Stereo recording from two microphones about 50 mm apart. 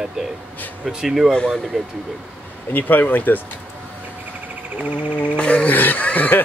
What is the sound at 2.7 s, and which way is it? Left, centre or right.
Speech, left.